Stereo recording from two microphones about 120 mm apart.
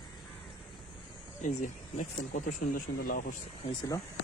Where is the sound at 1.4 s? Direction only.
80° left.